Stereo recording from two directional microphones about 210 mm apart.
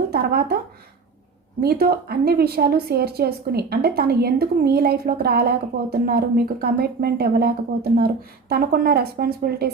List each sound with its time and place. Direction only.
0.1 s speech: 50° right (ahead or behind)
1.6 s a woman's voice: 45° right (ahead or behind)